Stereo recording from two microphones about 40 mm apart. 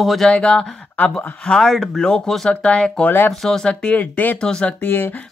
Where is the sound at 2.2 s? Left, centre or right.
Centre.